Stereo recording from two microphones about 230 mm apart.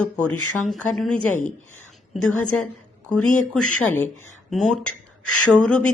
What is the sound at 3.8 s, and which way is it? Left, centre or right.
A woman's voice, centre.